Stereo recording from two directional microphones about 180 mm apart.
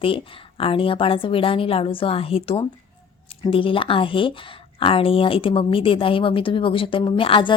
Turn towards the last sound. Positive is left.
turn(degrees=30)  # may be behind; listen again after turning